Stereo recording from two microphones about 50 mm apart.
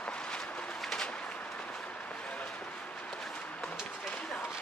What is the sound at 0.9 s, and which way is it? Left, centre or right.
Bird, left.